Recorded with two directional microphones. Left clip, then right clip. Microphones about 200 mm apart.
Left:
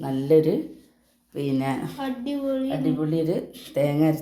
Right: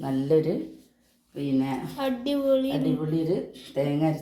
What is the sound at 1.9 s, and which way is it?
Speech, 35° right (ahead or behind).